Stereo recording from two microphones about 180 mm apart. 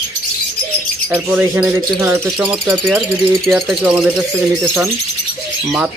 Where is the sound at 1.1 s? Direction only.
10° right (ahead or behind).